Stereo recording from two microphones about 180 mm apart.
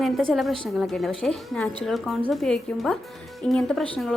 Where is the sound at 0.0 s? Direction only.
Centre (ahead or behind).